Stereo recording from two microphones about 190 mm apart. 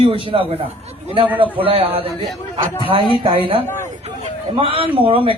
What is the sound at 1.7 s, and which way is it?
A man's voice, 30° right (ahead or behind).